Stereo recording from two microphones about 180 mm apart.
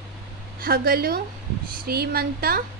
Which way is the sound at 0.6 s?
55° right (ahead or behind).